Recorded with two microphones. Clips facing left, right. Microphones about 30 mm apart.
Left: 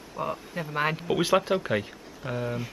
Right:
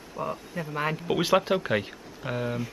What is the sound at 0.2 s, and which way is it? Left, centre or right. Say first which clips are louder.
Speech: left 1 dB; centre.